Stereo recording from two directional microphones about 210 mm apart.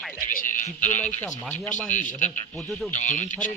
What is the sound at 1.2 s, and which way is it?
Speech, 10° left (ahead or behind).